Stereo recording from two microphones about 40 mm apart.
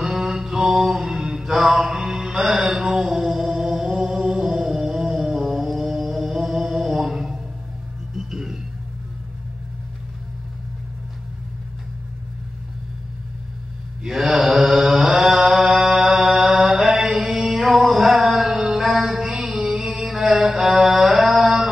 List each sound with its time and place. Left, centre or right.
0.0 s mantra: centre
3.0 s a sound: centre
6.0 s music: centre
8.2 s vehicle: centre
14.0 s mantra: centre
19.4 s a sound: centre
20.3 s mantra: centre